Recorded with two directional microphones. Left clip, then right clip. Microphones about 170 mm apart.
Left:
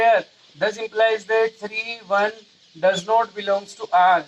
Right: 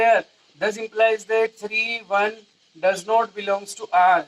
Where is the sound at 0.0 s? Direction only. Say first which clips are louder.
Left 1 dB; 15° left (ahead or behind).